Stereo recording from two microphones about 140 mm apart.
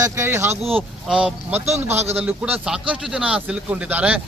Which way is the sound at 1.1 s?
5° right (ahead or behind).